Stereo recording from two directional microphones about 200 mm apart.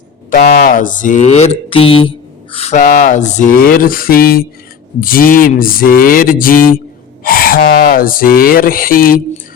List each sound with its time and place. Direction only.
0.3 s speech: 45° left (ahead or behind)